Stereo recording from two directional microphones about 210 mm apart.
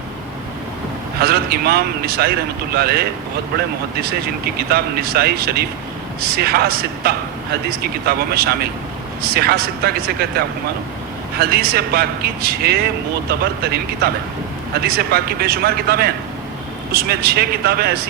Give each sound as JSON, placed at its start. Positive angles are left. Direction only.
{"t": 1.2, "sound": "speech", "side_deg": -45}